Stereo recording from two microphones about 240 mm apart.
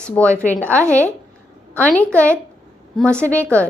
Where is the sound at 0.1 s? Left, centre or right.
Centre.